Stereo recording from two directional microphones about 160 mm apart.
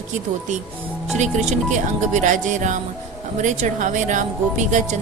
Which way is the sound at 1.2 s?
45° right (ahead or behind).